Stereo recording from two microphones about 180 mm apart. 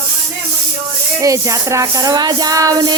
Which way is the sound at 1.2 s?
15° right (ahead or behind).